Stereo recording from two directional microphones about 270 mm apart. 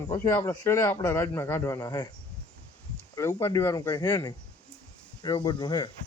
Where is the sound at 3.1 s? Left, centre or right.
Centre.